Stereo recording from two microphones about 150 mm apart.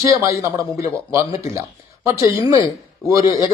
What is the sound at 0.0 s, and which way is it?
A man's voice, 20° right (ahead or behind).